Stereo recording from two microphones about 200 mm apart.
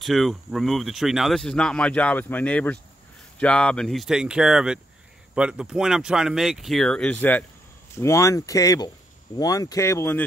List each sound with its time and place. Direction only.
0.0 s speech: centre (ahead or behind)